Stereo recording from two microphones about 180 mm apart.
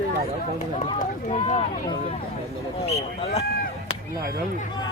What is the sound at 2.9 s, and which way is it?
Speech, 35° left (ahead or behind).